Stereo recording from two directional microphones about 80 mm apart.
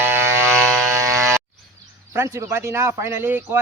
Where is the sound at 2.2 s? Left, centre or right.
Right.